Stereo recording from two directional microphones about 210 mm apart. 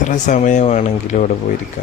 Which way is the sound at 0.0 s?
35° left (ahead or behind).